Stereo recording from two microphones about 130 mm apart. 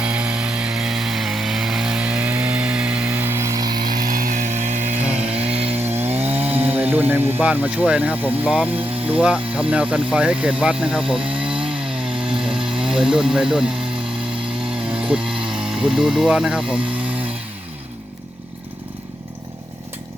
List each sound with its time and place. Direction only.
0.0 s chainsaw: 10° right (ahead or behind); by 3.8 s 30° right (ahead or behind)
3.8 s chainsaw: 90° right; by 4.9 s 70° right (ahead or behind)
5.5 s chainsaw: 50° right (ahead or behind)
5.8 s chainsaw: 15° right (ahead or behind)
6.2 s speech: 15° right (ahead or behind)
14.8 s speech: 5° right (ahead or behind)